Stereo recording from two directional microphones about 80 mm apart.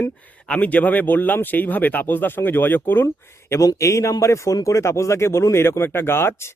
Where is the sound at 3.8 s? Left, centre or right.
Left.